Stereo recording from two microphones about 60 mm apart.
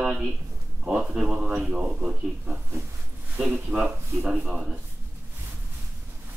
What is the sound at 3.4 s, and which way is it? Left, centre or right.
Speech, right.